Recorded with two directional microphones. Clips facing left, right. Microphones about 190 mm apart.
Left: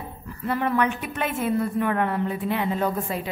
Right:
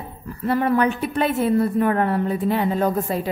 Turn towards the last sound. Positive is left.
turn(degrees=-40)  # may be behind; listen again after turning